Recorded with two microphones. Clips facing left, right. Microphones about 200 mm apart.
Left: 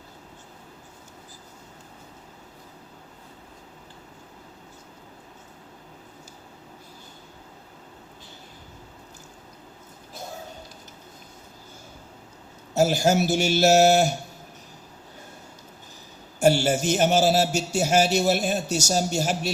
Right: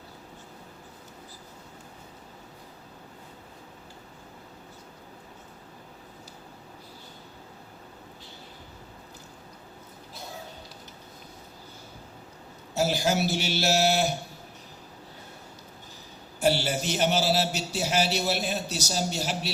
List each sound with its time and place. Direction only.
12.7 s a man's voice: 45° left (ahead or behind)
16.4 s a man's voice: 45° left (ahead or behind)